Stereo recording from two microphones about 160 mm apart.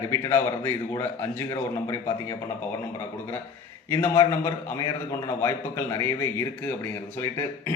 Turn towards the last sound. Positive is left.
turn(degrees=15)  # may be behind; listen again after turning